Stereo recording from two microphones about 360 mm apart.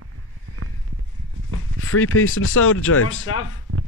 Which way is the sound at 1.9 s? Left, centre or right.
Left.